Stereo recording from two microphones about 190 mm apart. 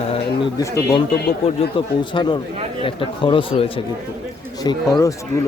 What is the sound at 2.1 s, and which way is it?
Speech, 25° left (ahead or behind).